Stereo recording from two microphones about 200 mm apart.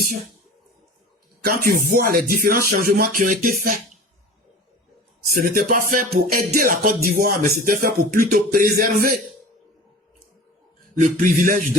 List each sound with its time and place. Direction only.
1.5 s music: 50° right (ahead or behind)
5.4 s music: 45° right (ahead or behind)
11.2 s a man's voice: 40° right (ahead or behind)